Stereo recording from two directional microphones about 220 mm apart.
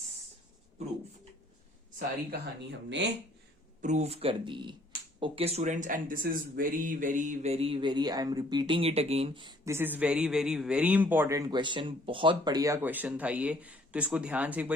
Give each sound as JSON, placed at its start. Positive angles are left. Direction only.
{"t": 2.0, "sound": "speech", "side_deg": -50}
{"t": 3.8, "sound": "speech", "side_deg": -30}